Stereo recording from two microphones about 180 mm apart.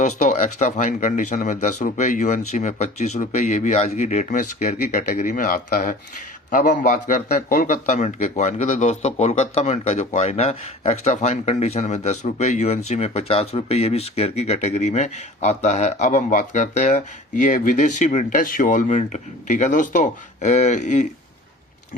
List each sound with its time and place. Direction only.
0.0 s a man's voice: 40° left (ahead or behind)